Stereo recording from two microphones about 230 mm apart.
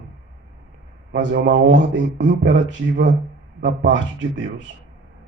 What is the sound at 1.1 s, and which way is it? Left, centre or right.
Speech, right.